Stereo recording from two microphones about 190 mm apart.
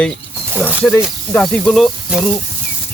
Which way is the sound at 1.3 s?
5° left (ahead or behind).